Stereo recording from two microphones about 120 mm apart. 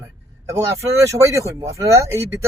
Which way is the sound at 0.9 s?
25° right (ahead or behind).